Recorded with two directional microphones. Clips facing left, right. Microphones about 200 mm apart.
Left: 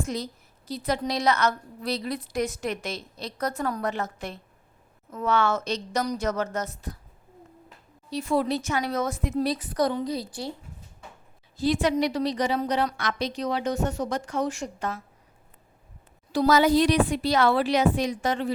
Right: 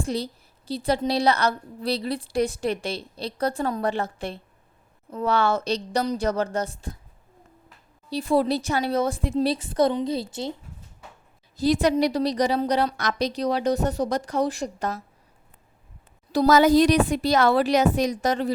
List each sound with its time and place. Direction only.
0.0 s a woman's voice: 30° right (ahead or behind)
8.1 s a woman's voice: 35° right (ahead or behind)
11.5 s a woman's voice: 40° right (ahead or behind)
16.3 s speech: 45° right (ahead or behind)